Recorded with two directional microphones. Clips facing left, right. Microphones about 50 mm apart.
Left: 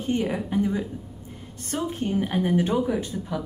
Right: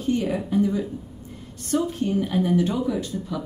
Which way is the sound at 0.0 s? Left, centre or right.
Left.